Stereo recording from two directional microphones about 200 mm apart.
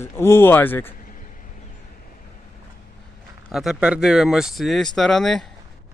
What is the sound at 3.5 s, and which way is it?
Speech, centre (ahead or behind).